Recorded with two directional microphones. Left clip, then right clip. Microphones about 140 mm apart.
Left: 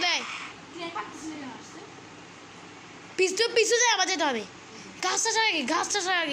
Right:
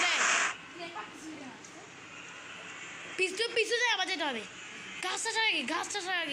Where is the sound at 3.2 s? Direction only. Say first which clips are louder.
Left 7 dB; 10° left (ahead or behind).